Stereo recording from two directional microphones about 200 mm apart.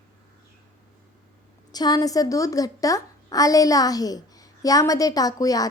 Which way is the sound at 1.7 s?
20° left (ahead or behind).